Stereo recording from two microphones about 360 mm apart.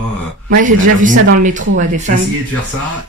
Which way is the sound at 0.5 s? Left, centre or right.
Right.